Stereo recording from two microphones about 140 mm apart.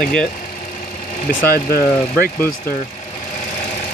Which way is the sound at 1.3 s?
80° left.